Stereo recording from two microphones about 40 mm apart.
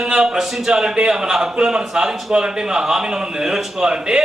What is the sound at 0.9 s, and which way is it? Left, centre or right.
A man's voice, right.